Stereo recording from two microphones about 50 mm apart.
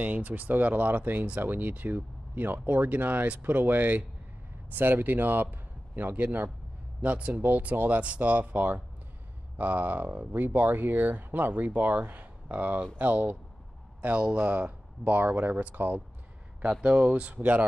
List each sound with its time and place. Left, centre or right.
0.0 s speech: right
14.0 s speech: right
14.5 s speech: right
16.8 s speech: right